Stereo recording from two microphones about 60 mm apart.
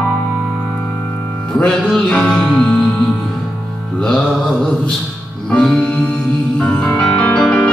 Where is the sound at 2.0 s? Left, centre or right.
Centre.